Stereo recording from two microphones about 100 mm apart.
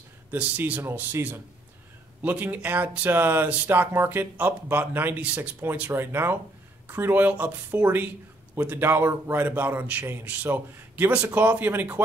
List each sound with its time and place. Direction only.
0.3 s speech: 15° right (ahead or behind)